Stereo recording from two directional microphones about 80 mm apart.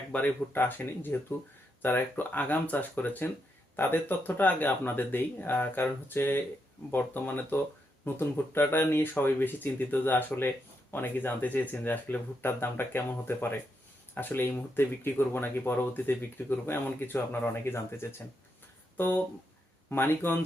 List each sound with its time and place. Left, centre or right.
0.1 s speech: centre
0.5 s speech: left